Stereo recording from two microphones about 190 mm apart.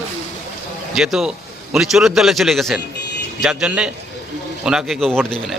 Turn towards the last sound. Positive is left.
turn(degrees=5)  # may be behind; listen again after turning